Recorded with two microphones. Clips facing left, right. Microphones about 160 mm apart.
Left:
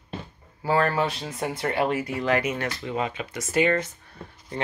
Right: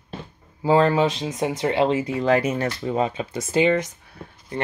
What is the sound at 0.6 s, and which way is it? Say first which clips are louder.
Speech: right 5 dB; 20° right (ahead or behind).